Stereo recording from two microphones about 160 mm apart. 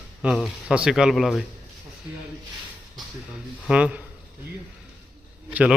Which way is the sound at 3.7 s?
5° right (ahead or behind).